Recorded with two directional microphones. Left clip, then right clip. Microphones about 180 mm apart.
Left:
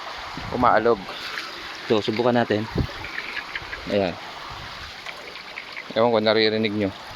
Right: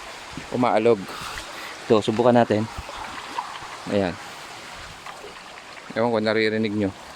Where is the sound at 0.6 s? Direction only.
35° right (ahead or behind).